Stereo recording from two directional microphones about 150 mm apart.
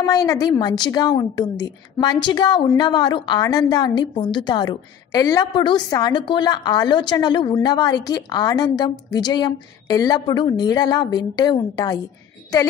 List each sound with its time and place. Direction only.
0.0 s a woman's voice: 25° left (ahead or behind)